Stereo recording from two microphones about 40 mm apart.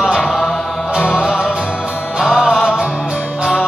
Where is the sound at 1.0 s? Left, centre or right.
Centre.